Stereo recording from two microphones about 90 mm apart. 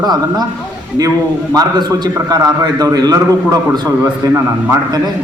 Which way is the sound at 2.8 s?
45° right (ahead or behind).